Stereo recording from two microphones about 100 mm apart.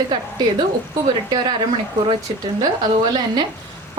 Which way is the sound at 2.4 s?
45° right (ahead or behind).